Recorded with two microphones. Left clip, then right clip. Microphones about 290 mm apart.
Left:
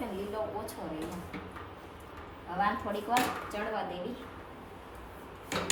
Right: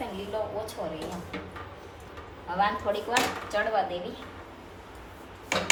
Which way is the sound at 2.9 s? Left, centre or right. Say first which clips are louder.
Right 4 dB; centre.